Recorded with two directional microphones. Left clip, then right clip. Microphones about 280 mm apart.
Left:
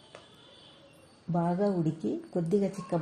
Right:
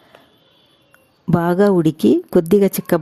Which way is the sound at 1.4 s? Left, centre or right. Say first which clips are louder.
Right 14 dB; right.